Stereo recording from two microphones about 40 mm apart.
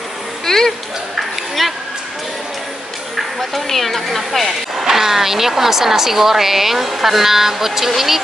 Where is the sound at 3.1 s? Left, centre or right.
Centre.